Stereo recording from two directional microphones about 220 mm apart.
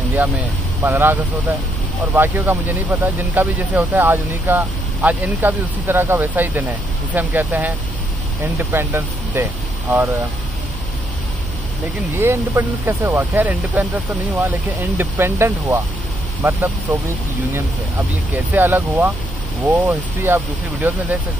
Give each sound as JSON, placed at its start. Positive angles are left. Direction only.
{"t": 0.1, "sound": "speech", "side_deg": -10}
{"t": 12.2, "sound": "speech", "side_deg": -10}
{"t": 18.5, "sound": "speech", "side_deg": -10}